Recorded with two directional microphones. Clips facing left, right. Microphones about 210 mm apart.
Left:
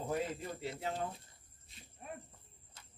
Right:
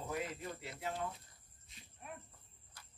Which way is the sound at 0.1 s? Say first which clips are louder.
Left 4 dB; 30° left (ahead or behind).